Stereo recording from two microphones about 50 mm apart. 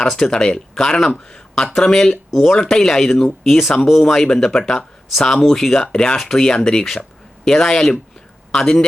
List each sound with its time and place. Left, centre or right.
0.3 s speech: centre
4.0 s speech: centre
5.8 s speech: centre